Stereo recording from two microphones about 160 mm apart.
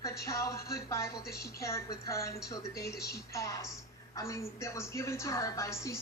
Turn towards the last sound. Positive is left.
turn(degrees=20)  # may be behind; listen again after turning